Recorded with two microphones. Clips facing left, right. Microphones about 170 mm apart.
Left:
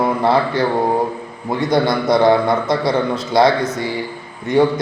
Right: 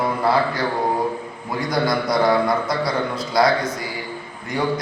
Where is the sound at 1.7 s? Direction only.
25° left (ahead or behind).